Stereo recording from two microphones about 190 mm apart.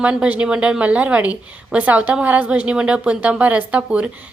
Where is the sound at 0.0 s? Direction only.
5° right (ahead or behind).